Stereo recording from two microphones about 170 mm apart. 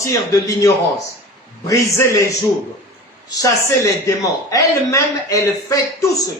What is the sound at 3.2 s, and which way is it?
A man's voice, 20° left (ahead or behind).